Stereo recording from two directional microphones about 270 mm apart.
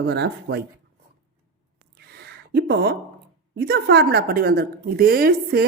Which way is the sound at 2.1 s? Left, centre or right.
Right.